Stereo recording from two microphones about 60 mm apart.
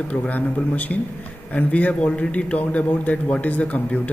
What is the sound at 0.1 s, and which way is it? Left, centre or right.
A man's voice, left.